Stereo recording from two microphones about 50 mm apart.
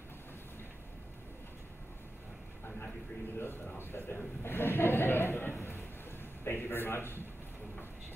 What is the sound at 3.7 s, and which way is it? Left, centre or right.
Speech, left.